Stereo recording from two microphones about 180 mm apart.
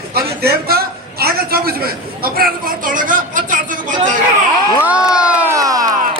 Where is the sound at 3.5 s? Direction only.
50° right (ahead or behind).